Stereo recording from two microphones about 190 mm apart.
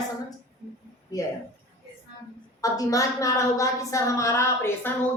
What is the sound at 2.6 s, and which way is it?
A woman's voice, 20° left (ahead or behind).